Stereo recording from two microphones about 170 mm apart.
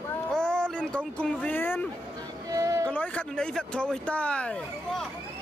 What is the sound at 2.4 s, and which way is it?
Music, 20° right (ahead or behind).